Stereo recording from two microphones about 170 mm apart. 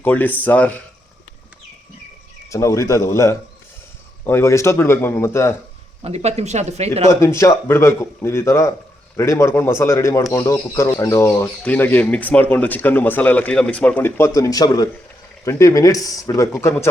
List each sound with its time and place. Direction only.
0.0 s speech: 10° left (ahead or behind)
2.5 s speech: 15° left (ahead or behind)
6.0 s speech: 40° right (ahead or behind)
7.1 s speech: 15° left (ahead or behind)